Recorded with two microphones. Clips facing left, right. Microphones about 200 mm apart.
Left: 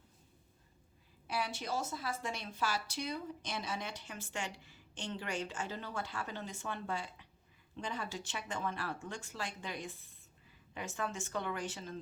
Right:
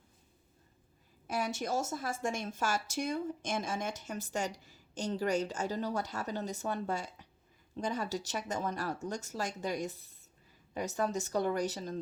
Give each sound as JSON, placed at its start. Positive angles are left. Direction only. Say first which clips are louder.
{"t": 1.3, "sound": "a woman's voice", "louder": "right 4 dB", "side_deg": -45}